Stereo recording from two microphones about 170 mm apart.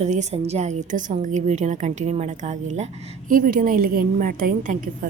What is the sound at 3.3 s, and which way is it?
A woman's voice, 55° right (ahead or behind).